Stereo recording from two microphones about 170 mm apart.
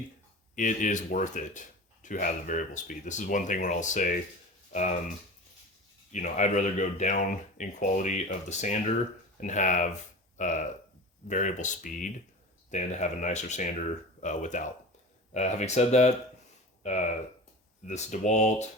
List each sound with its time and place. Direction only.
0.5 s speech: 50° left (ahead or behind)
6.1 s speech: 45° left (ahead or behind)